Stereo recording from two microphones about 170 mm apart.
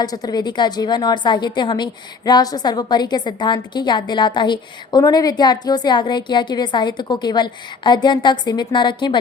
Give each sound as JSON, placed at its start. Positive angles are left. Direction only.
{"t": 0.0, "sound": "a woman's voice", "side_deg": 20}